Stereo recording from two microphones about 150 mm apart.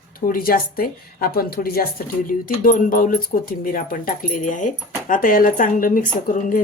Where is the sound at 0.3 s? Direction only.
75° left (ahead or behind).